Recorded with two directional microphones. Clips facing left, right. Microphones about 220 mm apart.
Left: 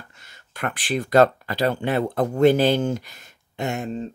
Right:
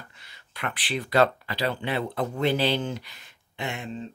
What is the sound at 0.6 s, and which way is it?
Speech, 45° left (ahead or behind).